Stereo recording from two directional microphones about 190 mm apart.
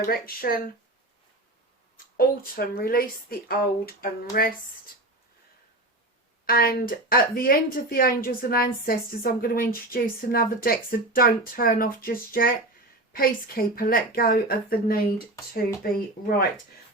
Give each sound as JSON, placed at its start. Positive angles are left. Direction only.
{"t": 0.0, "sound": "speech", "side_deg": 50}
{"t": 2.1, "sound": "speech", "side_deg": 50}
{"t": 6.4, "sound": "speech", "side_deg": 50}